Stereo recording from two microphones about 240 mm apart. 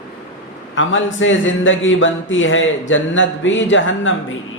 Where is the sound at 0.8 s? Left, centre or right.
Left.